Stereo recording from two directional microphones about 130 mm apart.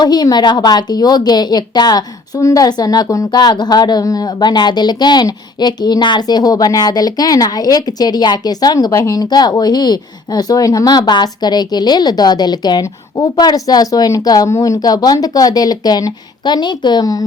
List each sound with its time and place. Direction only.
0.0 s a woman's voice: 30° left (ahead or behind)